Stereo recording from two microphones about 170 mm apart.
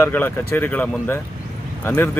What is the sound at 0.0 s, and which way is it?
Speech, 15° left (ahead or behind).